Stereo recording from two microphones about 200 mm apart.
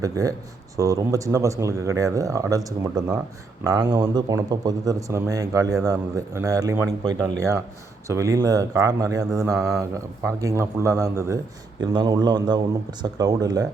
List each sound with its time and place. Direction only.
0.0 s speech: 15° right (ahead or behind)